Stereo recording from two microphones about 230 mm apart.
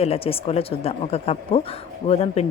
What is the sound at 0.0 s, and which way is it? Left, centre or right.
Speech, left.